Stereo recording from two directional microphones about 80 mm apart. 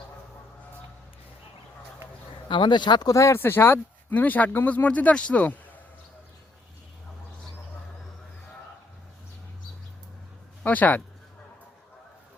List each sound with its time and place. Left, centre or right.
2.5 s speech: left
3.1 s speech: left
3.4 s speech: left
10.6 s speech: left